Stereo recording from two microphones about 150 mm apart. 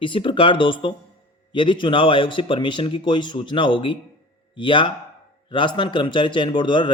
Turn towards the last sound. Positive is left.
turn(degrees=30)  # may be behind; listen again after turning